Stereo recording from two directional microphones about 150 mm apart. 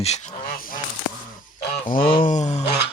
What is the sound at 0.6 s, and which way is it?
Goose, 65° left (ahead or behind).